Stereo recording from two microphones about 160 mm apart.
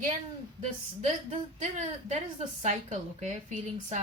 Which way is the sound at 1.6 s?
45° right (ahead or behind).